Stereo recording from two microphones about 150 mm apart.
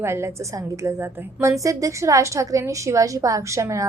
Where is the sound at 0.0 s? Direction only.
15° right (ahead or behind).